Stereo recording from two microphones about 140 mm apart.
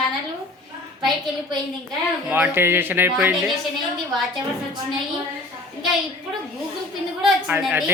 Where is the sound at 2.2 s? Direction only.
10° right (ahead or behind).